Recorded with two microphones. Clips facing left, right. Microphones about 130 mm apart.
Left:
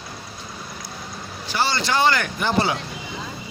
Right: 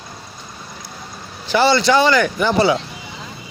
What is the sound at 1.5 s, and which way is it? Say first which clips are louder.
Speech: right 9 dB; 75° right (ahead or behind).